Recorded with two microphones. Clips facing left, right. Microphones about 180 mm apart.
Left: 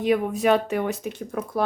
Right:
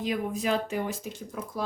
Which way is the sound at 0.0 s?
65° left (ahead or behind).